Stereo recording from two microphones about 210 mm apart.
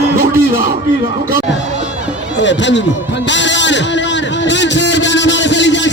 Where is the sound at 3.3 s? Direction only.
60° left (ahead or behind).